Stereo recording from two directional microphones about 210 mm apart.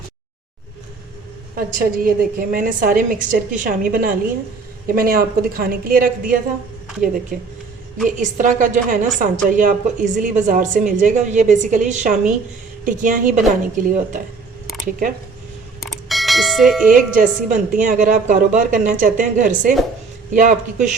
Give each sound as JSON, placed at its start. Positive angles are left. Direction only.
{"t": 1.5, "sound": "a woman's voice", "side_deg": -45}
{"t": 8.0, "sound": "a woman's voice", "side_deg": -35}
{"t": 15.8, "sound": "doorbell", "side_deg": 0}
{"t": 16.9, "sound": "a woman's voice", "side_deg": -40}